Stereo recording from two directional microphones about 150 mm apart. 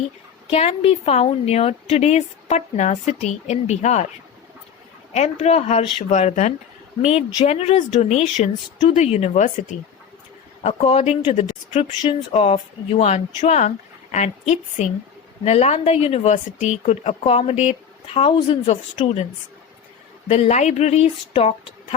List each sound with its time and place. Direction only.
0.5 s a woman's voice: 45° left (ahead or behind)
5.1 s a woman's voice: 45° left (ahead or behind)
20.2 s a woman's voice: 50° left (ahead or behind)